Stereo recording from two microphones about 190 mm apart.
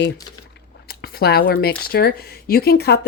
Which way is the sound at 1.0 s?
55° left (ahead or behind).